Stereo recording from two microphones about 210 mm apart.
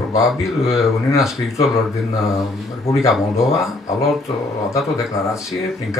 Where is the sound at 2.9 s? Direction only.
30° left (ahead or behind).